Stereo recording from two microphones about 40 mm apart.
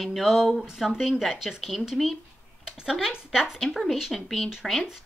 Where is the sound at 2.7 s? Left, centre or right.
Centre.